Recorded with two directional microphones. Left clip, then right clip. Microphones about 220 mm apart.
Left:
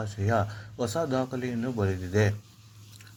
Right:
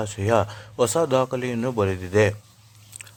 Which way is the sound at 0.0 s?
30° right (ahead or behind).